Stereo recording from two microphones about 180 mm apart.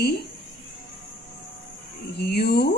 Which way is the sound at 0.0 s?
60° left (ahead or behind).